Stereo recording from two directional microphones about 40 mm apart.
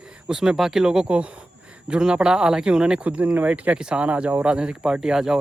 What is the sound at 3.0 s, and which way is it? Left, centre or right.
Speech, right.